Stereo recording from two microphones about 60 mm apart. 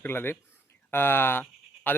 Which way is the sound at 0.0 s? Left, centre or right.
Left.